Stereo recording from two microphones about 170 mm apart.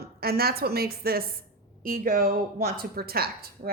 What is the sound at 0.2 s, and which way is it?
A woman's voice, 65° right (ahead or behind).